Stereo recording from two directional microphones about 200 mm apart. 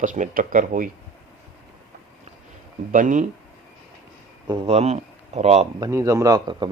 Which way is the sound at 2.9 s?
40° right (ahead or behind).